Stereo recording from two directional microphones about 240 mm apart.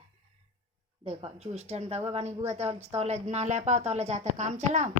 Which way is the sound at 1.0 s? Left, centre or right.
Right.